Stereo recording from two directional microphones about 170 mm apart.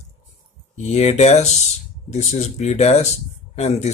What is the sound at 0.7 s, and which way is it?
Speech, 40° left (ahead or behind).